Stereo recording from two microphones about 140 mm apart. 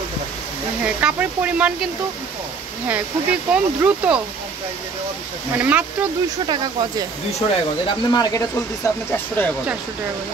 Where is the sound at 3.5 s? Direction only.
10° right (ahead or behind).